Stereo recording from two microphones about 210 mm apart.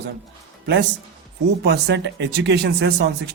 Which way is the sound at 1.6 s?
50° right (ahead or behind).